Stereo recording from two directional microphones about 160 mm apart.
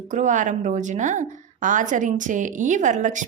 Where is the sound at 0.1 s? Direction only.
50° right (ahead or behind).